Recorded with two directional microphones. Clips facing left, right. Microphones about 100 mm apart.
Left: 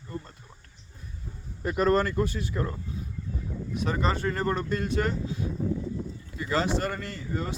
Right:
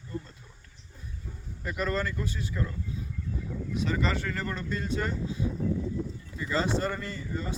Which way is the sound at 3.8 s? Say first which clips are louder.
Left 3 dB; 45° left (ahead or behind).